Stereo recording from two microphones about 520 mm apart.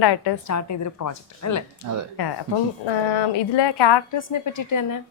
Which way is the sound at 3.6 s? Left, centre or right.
Left.